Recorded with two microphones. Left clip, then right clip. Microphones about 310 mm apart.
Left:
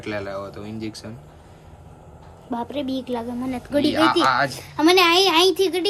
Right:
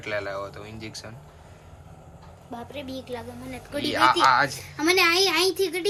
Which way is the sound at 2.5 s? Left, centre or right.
Left.